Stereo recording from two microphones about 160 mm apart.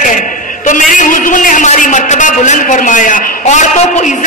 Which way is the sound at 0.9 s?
55° left (ahead or behind).